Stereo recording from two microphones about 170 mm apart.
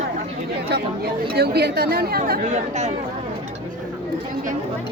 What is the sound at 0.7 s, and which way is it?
Chatter, 80° right.